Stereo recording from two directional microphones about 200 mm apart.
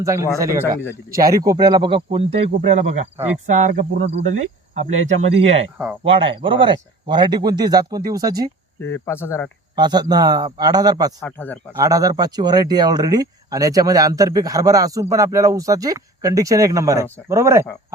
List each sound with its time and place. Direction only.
0.0 s speech: 15° right (ahead or behind); by 5.6 s 30° right (ahead or behind)
5.7 s speech: 5° right (ahead or behind)
6.1 s speech: 25° right (ahead or behind)
8.8 s speech: 10° left (ahead or behind)
9.7 s speech: 20° right (ahead or behind)
11.2 s speech: 10° left (ahead or behind)
11.8 s speech: 15° right (ahead or behind)